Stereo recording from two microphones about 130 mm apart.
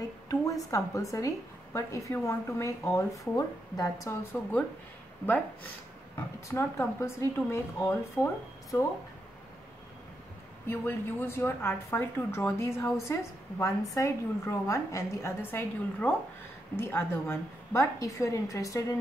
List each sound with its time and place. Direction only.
0.3 s a woman's voice: 25° left (ahead or behind)
4.1 s a woman's voice: 15° left (ahead or behind)
10.7 s a woman's voice: 15° left (ahead or behind)